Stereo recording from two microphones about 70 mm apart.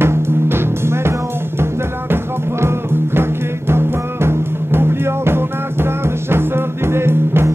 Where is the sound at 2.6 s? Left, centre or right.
Right.